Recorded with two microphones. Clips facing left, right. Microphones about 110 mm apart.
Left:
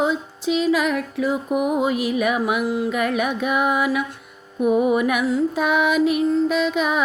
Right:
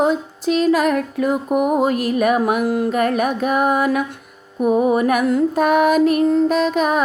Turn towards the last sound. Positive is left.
turn(degrees=-45)  # may be behind; listen again after turning